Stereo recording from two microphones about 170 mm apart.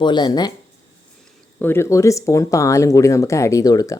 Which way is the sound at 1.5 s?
15° left (ahead or behind).